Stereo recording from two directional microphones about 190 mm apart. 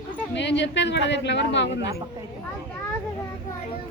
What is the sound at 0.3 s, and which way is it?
Speech, 65° left (ahead or behind).